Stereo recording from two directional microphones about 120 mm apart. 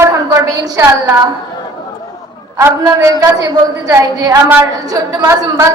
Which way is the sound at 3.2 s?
30° right (ahead or behind).